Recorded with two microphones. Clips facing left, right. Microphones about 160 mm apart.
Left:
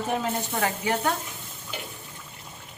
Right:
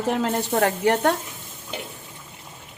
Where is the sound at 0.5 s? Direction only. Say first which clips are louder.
Right 8 dB; 60° right (ahead or behind).